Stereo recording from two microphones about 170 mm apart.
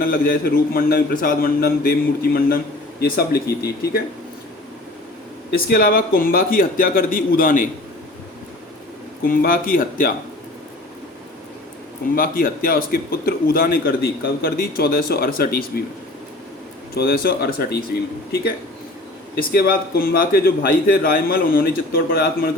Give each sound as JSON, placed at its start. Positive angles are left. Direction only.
{"t": 0.0, "sound": "a man's voice", "side_deg": 55}
{"t": 5.5, "sound": "a man's voice", "side_deg": 60}
{"t": 9.2, "sound": "a man's voice", "side_deg": 55}
{"t": 12.1, "sound": "a man's voice", "side_deg": 55}
{"t": 16.9, "sound": "a man's voice", "side_deg": 65}
{"t": 19.4, "sound": "a man's voice", "side_deg": 60}